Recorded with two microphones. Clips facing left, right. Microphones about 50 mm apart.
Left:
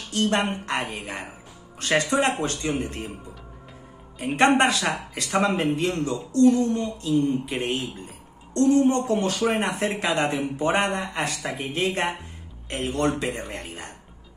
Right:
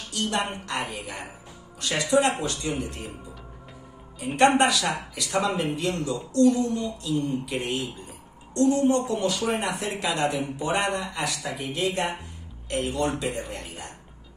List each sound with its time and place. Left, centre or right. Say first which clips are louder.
0.1 s a man's voice: left 4 dB; left
4.4 s a man's voice: even; left